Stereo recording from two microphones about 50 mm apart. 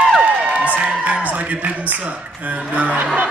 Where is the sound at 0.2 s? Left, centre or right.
Right.